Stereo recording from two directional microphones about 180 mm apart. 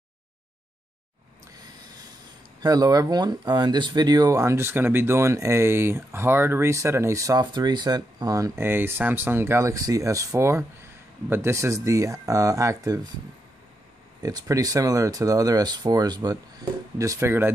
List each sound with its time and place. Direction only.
2.6 s speech: 20° right (ahead or behind)
14.2 s speech: 20° right (ahead or behind)